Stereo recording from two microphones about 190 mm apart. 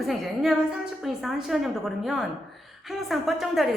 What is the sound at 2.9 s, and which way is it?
Speech, centre (ahead or behind).